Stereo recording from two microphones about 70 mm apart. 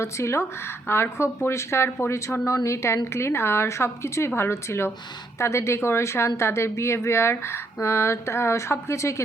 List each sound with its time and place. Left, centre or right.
0.0 s speech: left